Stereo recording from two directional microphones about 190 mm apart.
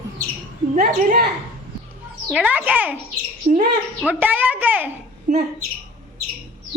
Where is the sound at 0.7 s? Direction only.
45° right (ahead or behind).